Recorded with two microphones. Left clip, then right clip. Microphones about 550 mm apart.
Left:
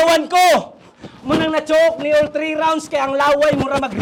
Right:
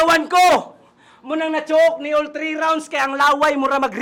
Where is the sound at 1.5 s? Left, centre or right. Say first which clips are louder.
Even; left.